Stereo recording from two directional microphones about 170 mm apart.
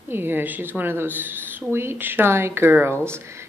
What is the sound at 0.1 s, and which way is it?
A woman's voice, 10° right (ahead or behind).